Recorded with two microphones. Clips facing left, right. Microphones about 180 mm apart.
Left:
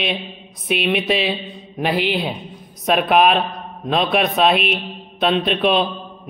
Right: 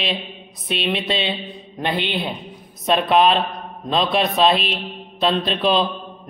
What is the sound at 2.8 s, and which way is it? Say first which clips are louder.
Mantra: left 1 dB; centre (ahead or behind).